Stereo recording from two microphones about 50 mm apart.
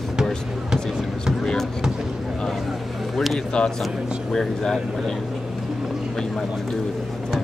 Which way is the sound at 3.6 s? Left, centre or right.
Centre.